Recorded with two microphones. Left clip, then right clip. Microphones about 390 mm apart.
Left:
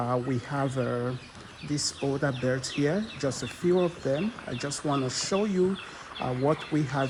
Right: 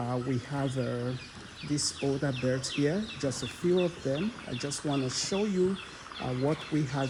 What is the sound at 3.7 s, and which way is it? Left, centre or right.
Speech, left.